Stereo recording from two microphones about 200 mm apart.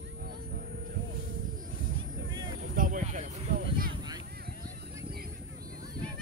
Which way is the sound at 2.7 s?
40° right (ahead or behind).